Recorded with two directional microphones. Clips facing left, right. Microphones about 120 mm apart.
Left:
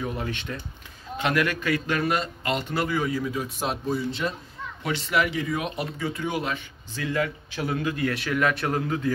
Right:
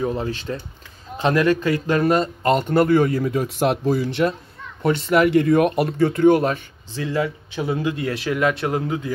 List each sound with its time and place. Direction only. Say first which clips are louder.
0.0 s a man's voice: right 7 dB; 30° right (ahead or behind); by 4.3 s 80° right
5.1 s a man's voice: right 10 dB; 55° right (ahead or behind)
7.0 s a man's voice: right 4 dB; 25° right (ahead or behind)